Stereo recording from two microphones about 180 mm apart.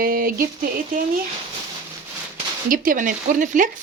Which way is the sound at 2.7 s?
50° right (ahead or behind).